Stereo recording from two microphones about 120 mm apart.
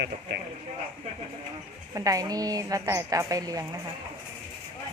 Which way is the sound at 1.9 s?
30° right (ahead or behind).